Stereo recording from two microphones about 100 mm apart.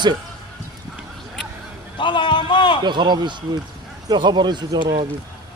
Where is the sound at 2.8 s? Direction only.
45° right (ahead or behind).